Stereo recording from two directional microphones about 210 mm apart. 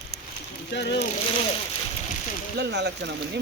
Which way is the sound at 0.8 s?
55° left (ahead or behind).